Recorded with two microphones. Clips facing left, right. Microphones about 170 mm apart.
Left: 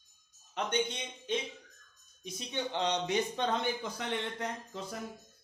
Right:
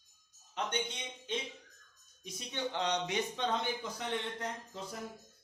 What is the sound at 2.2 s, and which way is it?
Speech, 20° left (ahead or behind).